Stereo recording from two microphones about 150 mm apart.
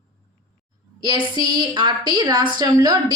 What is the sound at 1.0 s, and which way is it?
A woman's voice, 30° right (ahead or behind).